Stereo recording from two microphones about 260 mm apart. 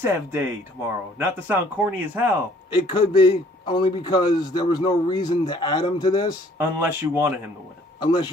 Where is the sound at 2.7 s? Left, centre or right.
Centre.